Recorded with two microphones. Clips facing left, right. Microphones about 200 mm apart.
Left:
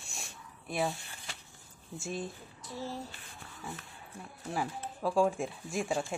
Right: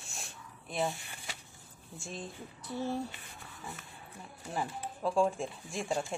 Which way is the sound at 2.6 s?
60° right (ahead or behind).